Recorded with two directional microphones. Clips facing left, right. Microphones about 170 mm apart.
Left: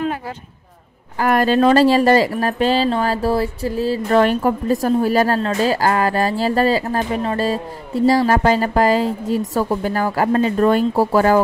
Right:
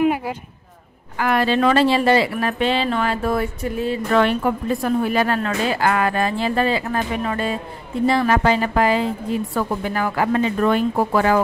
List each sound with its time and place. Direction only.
1.2 s speech: 45° left (ahead or behind)